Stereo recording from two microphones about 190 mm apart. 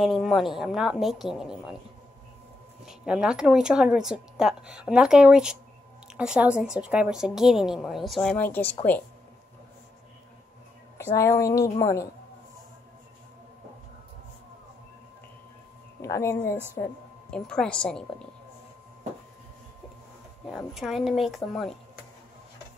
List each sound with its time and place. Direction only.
0.0 s a woman's voice: centre (ahead or behind)
2.8 s a woman's voice: 5° right (ahead or behind)
11.1 s speech: 15° left (ahead or behind)
16.0 s a woman's voice: 15° left (ahead or behind)
20.5 s a woman's voice: centre (ahead or behind)